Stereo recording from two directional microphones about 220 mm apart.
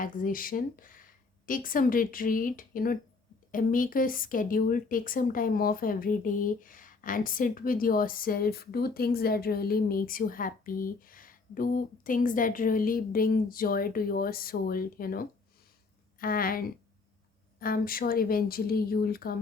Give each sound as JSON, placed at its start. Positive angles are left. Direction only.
{"t": 0.0, "sound": "speech", "side_deg": 40}